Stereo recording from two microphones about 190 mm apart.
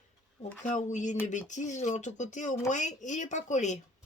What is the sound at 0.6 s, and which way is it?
Speech, 40° left (ahead or behind).